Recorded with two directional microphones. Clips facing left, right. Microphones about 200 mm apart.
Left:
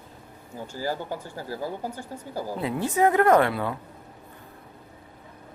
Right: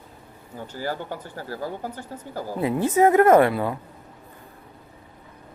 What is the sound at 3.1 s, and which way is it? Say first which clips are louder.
Speech: right 4 dB; 20° right (ahead or behind).